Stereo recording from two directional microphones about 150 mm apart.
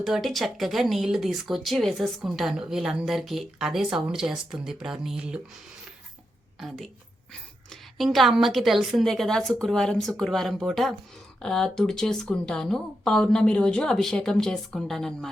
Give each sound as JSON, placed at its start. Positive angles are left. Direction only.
{"t": 0.0, "sound": "speech", "side_deg": 0}
{"t": 6.6, "sound": "speech", "side_deg": 0}